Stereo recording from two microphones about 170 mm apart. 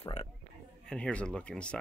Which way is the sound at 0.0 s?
40° left (ahead or behind).